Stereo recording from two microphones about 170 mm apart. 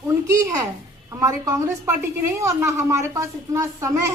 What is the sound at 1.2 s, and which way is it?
A woman's voice, 20° right (ahead or behind).